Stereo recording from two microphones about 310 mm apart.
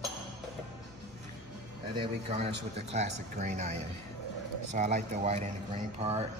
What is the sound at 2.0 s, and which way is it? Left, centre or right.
Speech, centre.